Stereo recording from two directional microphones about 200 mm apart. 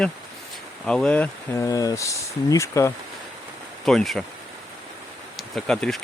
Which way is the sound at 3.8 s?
Centre (ahead or behind).